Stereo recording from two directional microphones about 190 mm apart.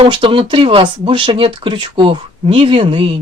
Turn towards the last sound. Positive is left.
turn(degrees=-25)  # may be behind; listen again after turning